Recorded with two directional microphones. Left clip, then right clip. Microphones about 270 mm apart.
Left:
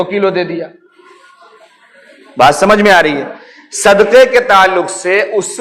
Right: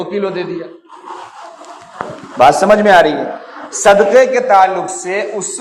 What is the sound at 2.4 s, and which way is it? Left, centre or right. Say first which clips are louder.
A man's voice: left 1 dB; left.